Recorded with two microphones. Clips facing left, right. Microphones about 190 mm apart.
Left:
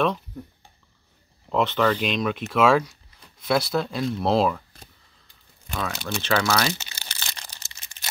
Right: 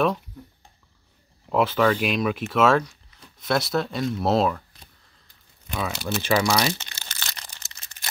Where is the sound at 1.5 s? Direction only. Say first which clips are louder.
Right 1 dB; 5° right (ahead or behind).